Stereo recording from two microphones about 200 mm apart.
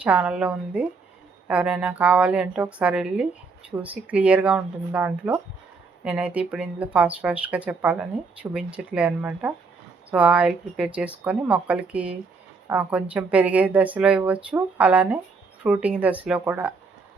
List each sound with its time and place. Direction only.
0.0 s a woman's voice: 5° right (ahead or behind)